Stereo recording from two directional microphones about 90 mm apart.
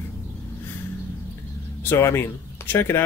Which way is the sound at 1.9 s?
25° left (ahead or behind).